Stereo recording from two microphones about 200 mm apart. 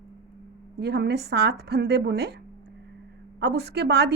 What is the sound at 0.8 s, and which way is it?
A woman's voice, 55° right (ahead or behind).